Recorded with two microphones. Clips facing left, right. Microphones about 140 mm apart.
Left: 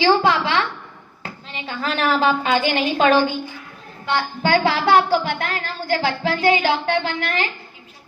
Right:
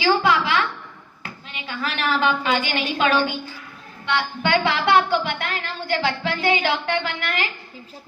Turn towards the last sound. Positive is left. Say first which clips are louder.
# left 3 dB
turn(degrees=35)  # may be behind; listen again after turning